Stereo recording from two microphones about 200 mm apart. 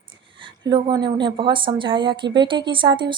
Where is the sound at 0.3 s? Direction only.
25° right (ahead or behind).